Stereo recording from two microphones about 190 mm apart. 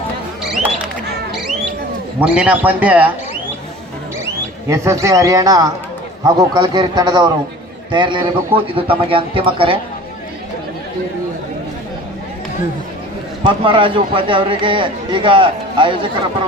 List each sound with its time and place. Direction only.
2.2 s a man's voice: 5° right (ahead or behind)
4.7 s a man's voice: 15° right (ahead or behind)
13.4 s speech: 25° right (ahead or behind)